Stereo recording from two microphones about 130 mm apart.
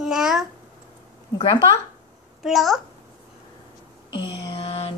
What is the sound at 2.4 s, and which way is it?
Music, centre (ahead or behind).